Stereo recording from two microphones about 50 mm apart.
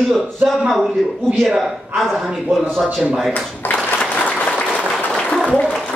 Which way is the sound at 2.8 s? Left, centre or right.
Centre.